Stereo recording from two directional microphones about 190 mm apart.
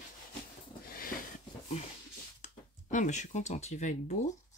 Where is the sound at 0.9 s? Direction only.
50° left (ahead or behind).